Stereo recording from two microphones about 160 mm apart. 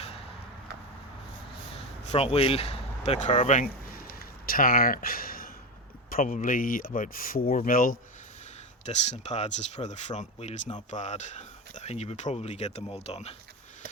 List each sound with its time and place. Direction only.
2.1 s speech: 40° left (ahead or behind)
4.4 s speech: 65° left (ahead or behind)
8.9 s speech: 45° left (ahead or behind)